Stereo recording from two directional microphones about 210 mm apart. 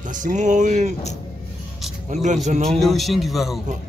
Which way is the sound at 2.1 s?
35° right (ahead or behind).